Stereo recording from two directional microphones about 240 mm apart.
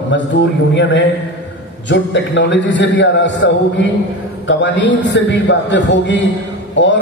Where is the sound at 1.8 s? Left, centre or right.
Left.